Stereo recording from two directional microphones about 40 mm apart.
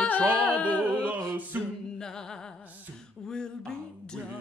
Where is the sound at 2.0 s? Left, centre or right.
Centre.